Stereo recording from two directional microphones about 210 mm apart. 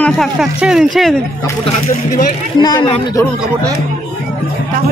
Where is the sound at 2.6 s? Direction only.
20° left (ahead or behind).